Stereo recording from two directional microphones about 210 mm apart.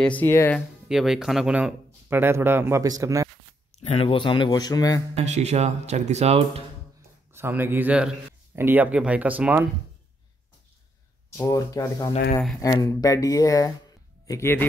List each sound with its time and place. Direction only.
0.0 s speech: 10° left (ahead or behind)
0.8 s speech: centre (ahead or behind)
3.8 s speech: 30° left (ahead or behind)
5.1 s speech: 30° right (ahead or behind)
7.3 s speech: 10° right (ahead or behind)
11.3 s speech: 15° left (ahead or behind)